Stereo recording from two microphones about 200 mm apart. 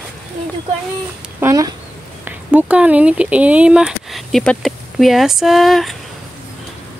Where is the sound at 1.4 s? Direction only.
15° right (ahead or behind); by 5.9 s centre (ahead or behind).